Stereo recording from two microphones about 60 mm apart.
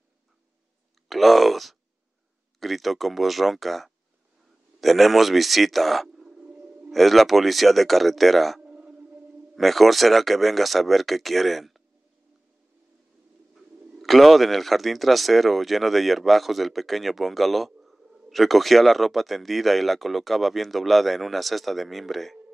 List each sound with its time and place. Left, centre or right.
1.0 s speech: centre
6.4 s a sound: right
6.9 s speech: centre
8.6 s whale vocalization: centre
9.6 s speech: centre
13.9 s speech: centre